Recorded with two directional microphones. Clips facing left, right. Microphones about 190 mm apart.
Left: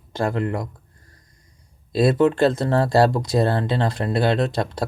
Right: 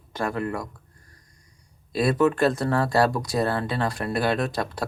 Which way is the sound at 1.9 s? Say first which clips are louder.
Left 4 dB; 25° left (ahead or behind).